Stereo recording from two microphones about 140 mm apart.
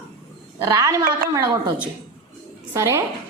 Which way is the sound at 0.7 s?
25° right (ahead or behind).